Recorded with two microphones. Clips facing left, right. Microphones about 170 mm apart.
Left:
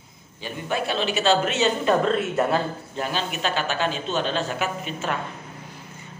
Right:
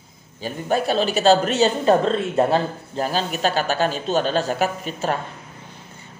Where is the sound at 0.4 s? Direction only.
40° right (ahead or behind).